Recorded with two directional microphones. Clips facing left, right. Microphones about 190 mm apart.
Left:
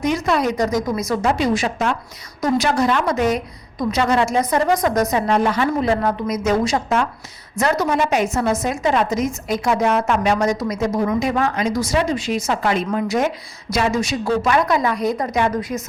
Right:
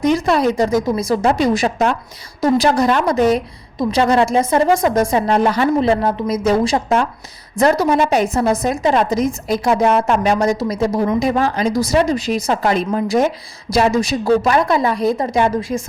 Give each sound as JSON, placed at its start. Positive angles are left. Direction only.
{"t": 0.0, "sound": "a woman's voice", "side_deg": -35}
{"t": 5.9, "sound": "a woman's voice", "side_deg": -25}